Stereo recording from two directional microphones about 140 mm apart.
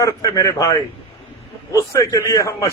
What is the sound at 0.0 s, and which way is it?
Speech, 25° left (ahead or behind).